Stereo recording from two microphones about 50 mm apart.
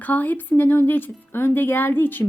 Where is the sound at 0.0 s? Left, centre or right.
Left.